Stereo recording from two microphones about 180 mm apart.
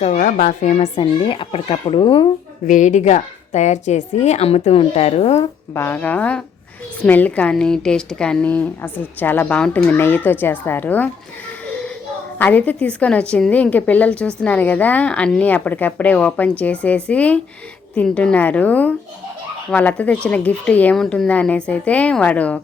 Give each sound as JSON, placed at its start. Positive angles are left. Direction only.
{"t": 0.0, "sound": "a woman's voice", "side_deg": 40}
{"t": 2.6, "sound": "a woman's voice", "side_deg": 40}
{"t": 5.7, "sound": "a woman's voice", "side_deg": 10}
{"t": 12.4, "sound": "a woman's voice", "side_deg": 10}